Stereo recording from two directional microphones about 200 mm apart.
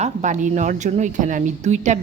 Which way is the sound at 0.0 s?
35° right (ahead or behind).